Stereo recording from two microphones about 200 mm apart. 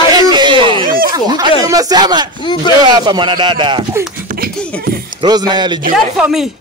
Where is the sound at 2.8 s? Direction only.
20° right (ahead or behind).